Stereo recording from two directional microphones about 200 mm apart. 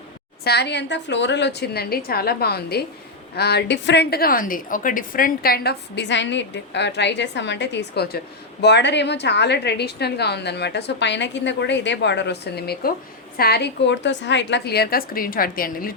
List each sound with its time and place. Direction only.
0.4 s a woman's voice: 55° left (ahead or behind)